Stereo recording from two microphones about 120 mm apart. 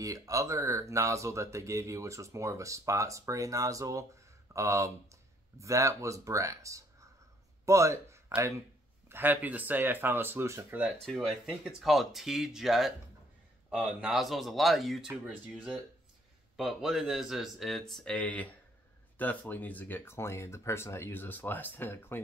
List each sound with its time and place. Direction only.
0.0 s speech: 30° right (ahead or behind)
11.0 s speech: centre (ahead or behind); by 22.2 s 20° left (ahead or behind)